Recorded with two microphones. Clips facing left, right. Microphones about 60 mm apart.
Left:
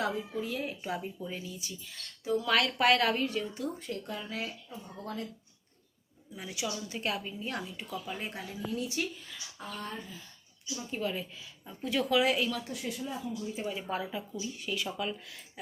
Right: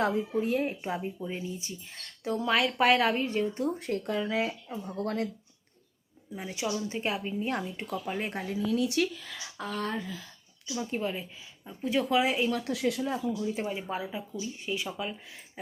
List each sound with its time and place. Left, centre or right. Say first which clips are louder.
0.0 s a woman's voice: right 5 dB; right
0.8 s speech: right 3 dB; right
2.5 s speech: right 2 dB; centre
3.4 s a woman's voice: right 6 dB; right
4.2 s speech: right 9 dB; right
6.4 s speech: right 5 dB; right
7.3 s a woman's voice: right 6 dB; right
8.5 s speech: right 8 dB; right
11.0 s speech: right 1 dB; centre
12.6 s speech: right 8 dB; right
13.7 s speech: right 1 dB; centre
14.4 s speech: right 3 dB; right
15.6 s a sound: right 3 dB; right